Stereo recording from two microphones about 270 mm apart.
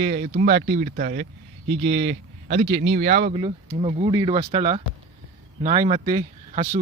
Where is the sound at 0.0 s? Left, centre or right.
Right.